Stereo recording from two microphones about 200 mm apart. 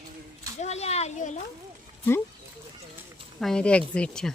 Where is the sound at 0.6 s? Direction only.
35° left (ahead or behind).